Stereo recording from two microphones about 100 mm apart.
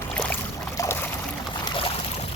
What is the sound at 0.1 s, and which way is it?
Boat, 10° left (ahead or behind).